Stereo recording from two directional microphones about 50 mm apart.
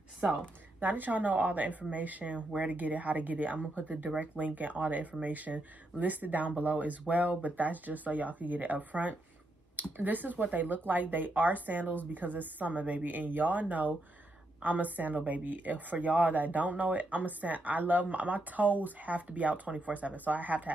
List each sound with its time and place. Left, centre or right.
0.7 s a woman's voice: right